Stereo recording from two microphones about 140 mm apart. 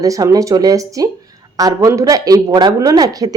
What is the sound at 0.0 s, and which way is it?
Speech, 25° right (ahead or behind).